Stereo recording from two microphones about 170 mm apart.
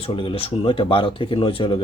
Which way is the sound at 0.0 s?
35° left (ahead or behind).